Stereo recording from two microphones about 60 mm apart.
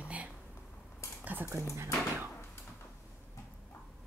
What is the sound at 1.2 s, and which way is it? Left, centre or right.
Speech, right.